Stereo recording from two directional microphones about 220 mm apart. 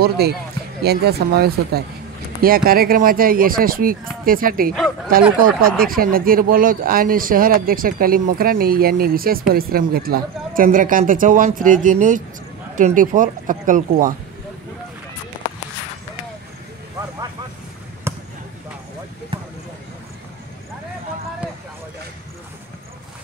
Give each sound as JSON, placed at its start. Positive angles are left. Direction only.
{"t": 0.2, "sound": "speech", "side_deg": -45}
{"t": 18.1, "sound": "basketball bounce", "side_deg": -10}
{"t": 19.3, "sound": "a sound", "side_deg": -25}